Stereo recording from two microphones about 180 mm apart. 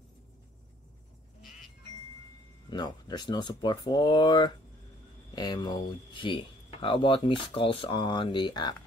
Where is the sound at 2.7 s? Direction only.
25° left (ahead or behind).